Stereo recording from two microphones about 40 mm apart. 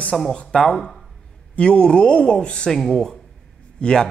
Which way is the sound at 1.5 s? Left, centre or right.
Left.